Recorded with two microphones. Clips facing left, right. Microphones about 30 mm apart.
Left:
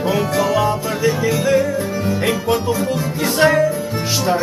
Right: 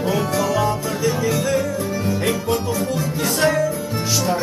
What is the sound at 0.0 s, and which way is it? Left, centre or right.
Music, centre.